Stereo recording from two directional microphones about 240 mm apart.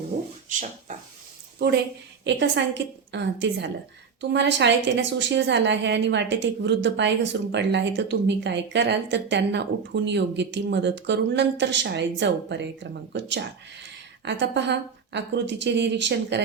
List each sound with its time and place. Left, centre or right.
1.5 s a woman's voice: right